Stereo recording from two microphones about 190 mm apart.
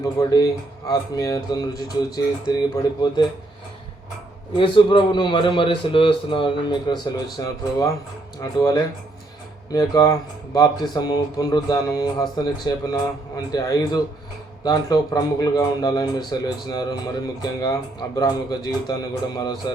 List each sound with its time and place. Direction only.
0.0 s speech: 20° left (ahead or behind)
4.5 s speech: 25° left (ahead or behind)